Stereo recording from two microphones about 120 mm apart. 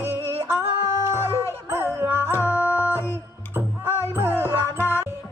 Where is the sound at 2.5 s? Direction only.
20° left (ahead or behind).